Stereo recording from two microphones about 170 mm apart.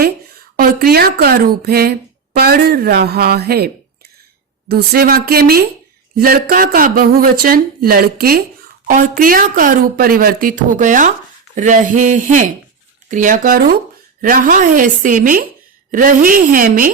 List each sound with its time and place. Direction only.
0.5 s speech: 65° right (ahead or behind)
4.7 s speech: 65° right (ahead or behind)
8.9 s speech: 50° right (ahead or behind)